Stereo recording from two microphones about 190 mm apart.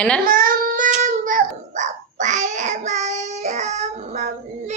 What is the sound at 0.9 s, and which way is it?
Babbling, 45° right (ahead or behind).